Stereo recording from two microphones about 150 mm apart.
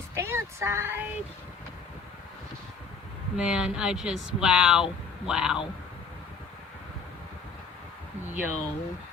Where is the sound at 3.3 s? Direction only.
5° right (ahead or behind).